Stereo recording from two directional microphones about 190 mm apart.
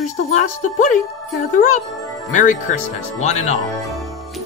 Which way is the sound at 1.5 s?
40° left (ahead or behind).